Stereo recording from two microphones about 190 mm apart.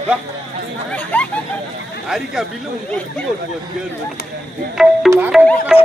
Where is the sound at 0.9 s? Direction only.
10° left (ahead or behind).